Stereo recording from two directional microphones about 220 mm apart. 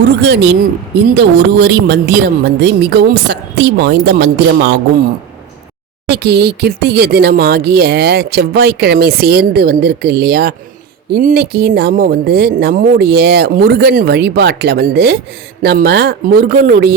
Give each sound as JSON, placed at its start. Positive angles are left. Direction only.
{"t": 0.2, "sound": "speech", "side_deg": -50}
{"t": 6.1, "sound": "speech", "side_deg": -50}